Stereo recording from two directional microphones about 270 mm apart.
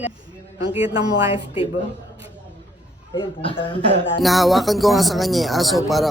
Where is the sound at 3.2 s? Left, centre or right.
Centre.